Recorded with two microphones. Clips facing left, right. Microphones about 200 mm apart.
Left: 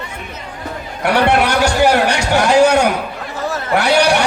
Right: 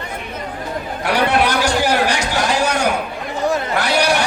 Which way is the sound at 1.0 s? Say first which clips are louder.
Left 3 dB; 65° left (ahead or behind).